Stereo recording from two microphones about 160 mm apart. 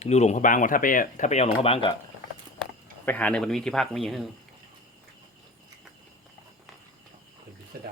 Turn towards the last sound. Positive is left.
turn(degrees=-75)  # may be behind; listen again after turning